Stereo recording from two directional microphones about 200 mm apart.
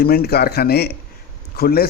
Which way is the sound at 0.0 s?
50° left (ahead or behind).